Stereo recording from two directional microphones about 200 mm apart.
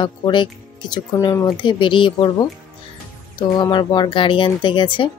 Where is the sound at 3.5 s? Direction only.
20° left (ahead or behind).